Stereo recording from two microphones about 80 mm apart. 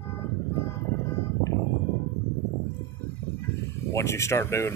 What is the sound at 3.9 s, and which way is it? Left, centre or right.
Speech, left.